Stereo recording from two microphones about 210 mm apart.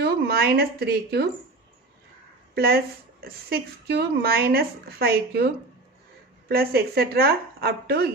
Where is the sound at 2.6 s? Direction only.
45° right (ahead or behind).